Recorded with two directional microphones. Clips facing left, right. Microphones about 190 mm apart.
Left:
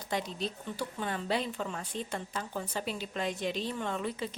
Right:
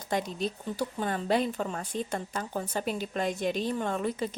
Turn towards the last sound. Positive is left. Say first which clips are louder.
# right 4 dB
turn(degrees=-45)  # may be behind; listen again after turning